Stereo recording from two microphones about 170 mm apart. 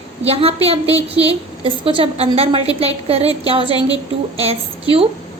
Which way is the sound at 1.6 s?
30° right (ahead or behind).